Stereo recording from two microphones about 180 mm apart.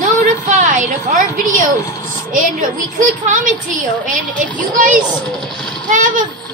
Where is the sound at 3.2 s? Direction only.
45° right (ahead or behind).